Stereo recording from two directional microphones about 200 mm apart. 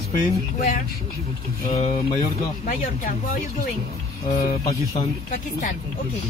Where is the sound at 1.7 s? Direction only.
30° left (ahead or behind).